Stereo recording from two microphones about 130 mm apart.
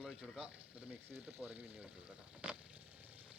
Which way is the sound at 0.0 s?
5° right (ahead or behind).